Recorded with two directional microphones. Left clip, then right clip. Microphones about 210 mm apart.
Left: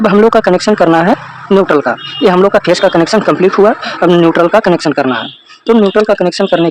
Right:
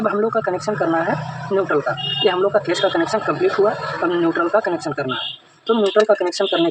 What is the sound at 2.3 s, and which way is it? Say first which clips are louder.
Speech: left 11 dB; 50° left (ahead or behind).